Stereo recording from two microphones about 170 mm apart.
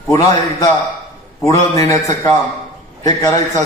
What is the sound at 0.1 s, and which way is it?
A man's voice, 20° left (ahead or behind).